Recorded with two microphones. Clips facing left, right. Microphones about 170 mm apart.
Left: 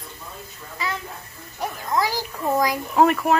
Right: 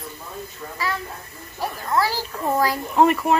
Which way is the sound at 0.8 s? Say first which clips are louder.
Right 1 dB; 20° left (ahead or behind).